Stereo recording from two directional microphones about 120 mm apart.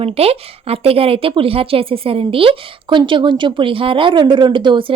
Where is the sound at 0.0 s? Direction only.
55° right (ahead or behind).